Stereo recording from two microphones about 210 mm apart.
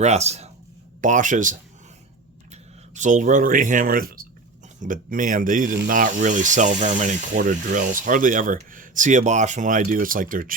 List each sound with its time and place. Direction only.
0.0 s speech: 30° right (ahead or behind)